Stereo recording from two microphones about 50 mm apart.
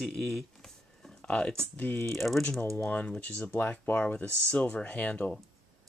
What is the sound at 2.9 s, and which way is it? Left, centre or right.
Speech, left.